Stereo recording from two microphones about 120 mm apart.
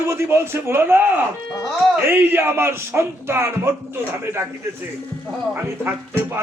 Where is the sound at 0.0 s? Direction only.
20° right (ahead or behind).